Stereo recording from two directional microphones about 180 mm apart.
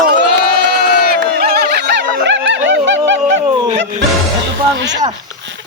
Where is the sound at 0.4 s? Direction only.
60° right (ahead or behind); by 3.0 s 90° right.